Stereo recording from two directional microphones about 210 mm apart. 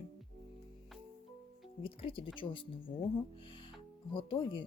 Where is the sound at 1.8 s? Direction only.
25° left (ahead or behind).